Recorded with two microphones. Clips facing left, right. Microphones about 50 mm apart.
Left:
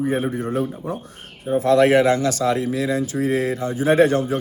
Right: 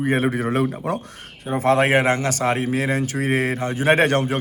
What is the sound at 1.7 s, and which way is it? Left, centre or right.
A man's voice, right.